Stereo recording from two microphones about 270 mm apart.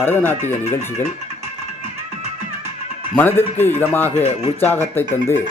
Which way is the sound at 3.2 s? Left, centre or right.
Centre.